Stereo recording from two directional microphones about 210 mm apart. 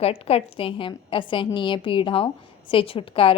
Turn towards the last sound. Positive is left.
turn(degrees=25)  # may be behind; listen again after turning